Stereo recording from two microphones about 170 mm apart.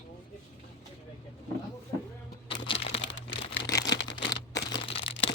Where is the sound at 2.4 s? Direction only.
30° left (ahead or behind).